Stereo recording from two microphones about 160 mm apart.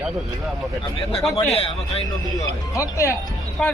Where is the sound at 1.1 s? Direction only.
Centre (ahead or behind).